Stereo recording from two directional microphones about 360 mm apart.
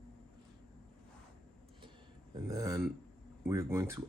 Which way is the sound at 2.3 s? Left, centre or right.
Centre.